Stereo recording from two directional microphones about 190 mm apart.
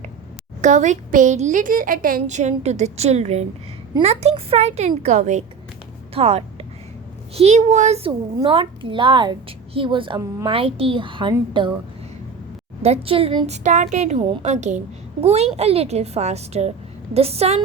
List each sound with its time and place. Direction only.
0.6 s a woman's voice: 40° right (ahead or behind)
12.8 s a woman's voice: 30° right (ahead or behind)